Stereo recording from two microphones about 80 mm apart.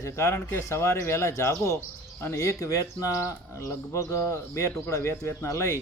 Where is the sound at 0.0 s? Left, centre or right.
Left.